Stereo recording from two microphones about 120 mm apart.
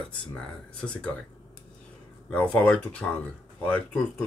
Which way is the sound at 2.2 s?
10° left (ahead or behind).